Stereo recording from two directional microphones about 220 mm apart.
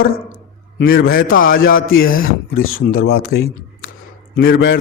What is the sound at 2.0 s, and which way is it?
Speech, 40° left (ahead or behind).